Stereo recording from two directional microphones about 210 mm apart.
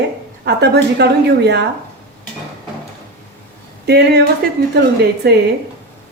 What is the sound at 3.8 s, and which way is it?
Speech, 50° right (ahead or behind).